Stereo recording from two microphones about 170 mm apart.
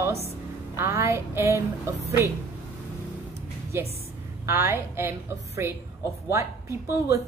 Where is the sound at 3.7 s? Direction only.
15° right (ahead or behind).